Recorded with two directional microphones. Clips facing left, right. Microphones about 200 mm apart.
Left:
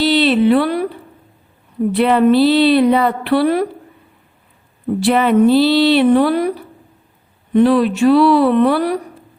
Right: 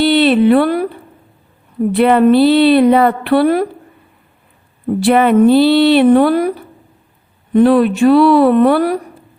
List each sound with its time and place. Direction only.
0.0 s a sound: 55° right (ahead or behind)
1.9 s a woman's voice: 50° right (ahead or behind)
4.9 s a woman's voice: 55° right (ahead or behind)
7.5 s a woman's voice: 50° right (ahead or behind)